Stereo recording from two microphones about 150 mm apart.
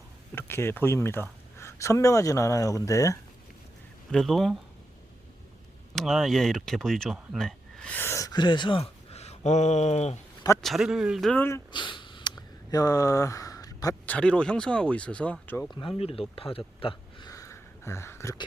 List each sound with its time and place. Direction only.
0.3 s speech: 15° left (ahead or behind)
4.1 s speech: centre (ahead or behind)
5.9 s speech: centre (ahead or behind); by 10.2 s 45° left (ahead or behind)
10.6 s speech: centre (ahead or behind)
11.3 s speech: 15° left (ahead or behind)
11.7 s sniff: 30° left (ahead or behind)
12.7 s speech: 20° left (ahead or behind)
14.1 s speech: 5° left (ahead or behind)
15.7 s speech: 35° left (ahead or behind)
16.3 s a sound: 40° left (ahead or behind); by 18.3 s 15° left (ahead or behind)